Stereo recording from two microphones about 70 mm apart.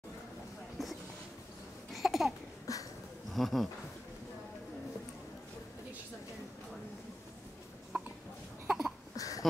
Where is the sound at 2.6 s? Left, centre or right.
Left.